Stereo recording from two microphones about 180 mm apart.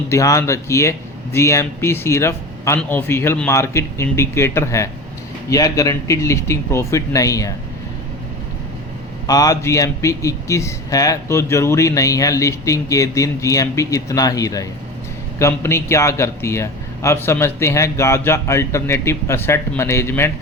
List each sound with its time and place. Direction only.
0.1 s a man's voice: 15° left (ahead or behind)
9.2 s a man's voice: 20° left (ahead or behind)